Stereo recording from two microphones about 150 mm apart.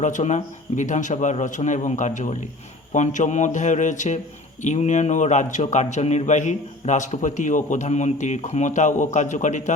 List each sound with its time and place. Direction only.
0.0 s a man's voice: 55° left (ahead or behind)